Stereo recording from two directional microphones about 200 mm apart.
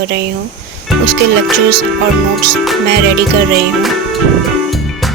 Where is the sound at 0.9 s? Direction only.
Centre (ahead or behind).